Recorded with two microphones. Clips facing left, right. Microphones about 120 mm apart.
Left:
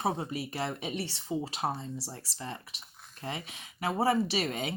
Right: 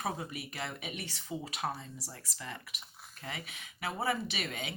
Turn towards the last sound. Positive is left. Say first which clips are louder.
# left 7 dB
turn(degrees=35)  # may be behind; listen again after turning